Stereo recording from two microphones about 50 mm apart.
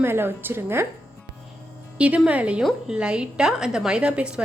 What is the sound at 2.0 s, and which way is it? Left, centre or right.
A woman's voice, right.